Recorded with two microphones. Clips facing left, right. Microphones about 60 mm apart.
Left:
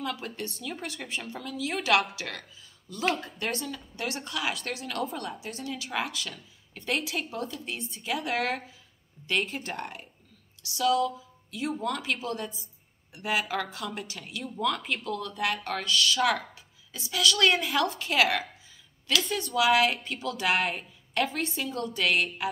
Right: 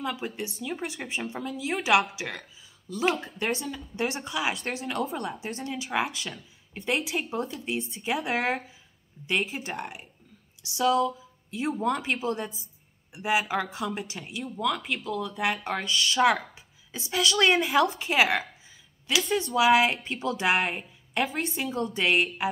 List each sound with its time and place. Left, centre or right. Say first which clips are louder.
0.0 s speech: right 2 dB; centre
4.6 s speech: right 2 dB; right
8.4 s speech: right 2 dB; centre
10.6 s speech: right 2 dB; right
14.4 s speech: right 1 dB; centre; by 22.5 s right